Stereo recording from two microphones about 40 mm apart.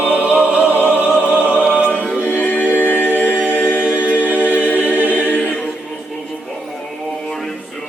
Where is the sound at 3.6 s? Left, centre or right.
Left.